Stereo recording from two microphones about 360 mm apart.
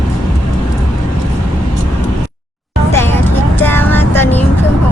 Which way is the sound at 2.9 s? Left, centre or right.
Centre.